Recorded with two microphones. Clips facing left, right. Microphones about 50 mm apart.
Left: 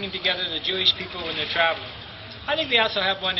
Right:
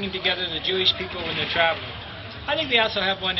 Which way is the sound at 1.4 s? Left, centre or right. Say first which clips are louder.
Even; centre.